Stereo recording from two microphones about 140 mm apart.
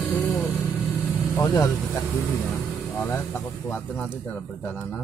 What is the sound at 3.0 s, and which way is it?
Speech, 15° left (ahead or behind).